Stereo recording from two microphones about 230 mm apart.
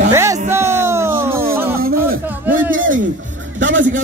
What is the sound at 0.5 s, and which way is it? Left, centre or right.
Music, centre.